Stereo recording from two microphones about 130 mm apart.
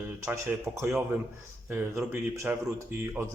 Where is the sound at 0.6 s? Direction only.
20° right (ahead or behind).